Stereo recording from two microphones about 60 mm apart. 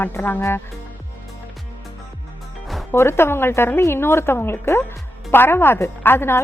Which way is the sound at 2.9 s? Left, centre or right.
Left.